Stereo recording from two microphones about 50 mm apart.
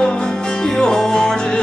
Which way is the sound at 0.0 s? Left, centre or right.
Centre.